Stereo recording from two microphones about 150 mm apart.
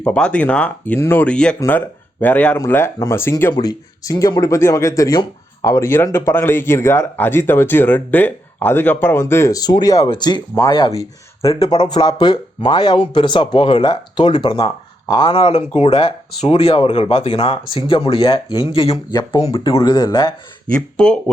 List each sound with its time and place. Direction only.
0.0 s speech: 5° left (ahead or behind); by 20.3 s 25° left (ahead or behind)
20.9 s speech: 5° left (ahead or behind)